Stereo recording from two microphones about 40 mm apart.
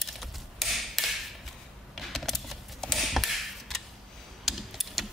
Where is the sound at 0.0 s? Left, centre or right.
Centre.